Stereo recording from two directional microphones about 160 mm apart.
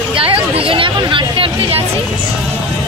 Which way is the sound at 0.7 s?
35° right (ahead or behind).